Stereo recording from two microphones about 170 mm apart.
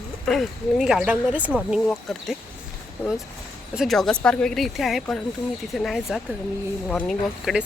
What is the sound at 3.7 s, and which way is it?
Speech, centre (ahead or behind).